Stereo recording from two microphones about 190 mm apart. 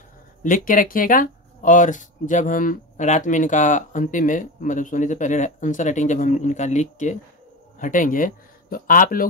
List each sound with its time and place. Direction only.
0.4 s speech: 45° left (ahead or behind)